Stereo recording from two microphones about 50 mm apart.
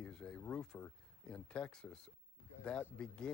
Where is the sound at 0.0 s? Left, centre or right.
Centre.